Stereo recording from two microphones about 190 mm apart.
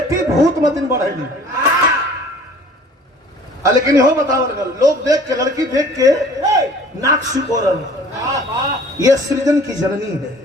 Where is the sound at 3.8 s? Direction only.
20° right (ahead or behind).